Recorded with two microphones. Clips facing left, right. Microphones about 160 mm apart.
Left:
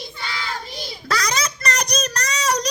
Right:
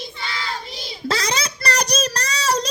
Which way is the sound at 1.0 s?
25° right (ahead or behind).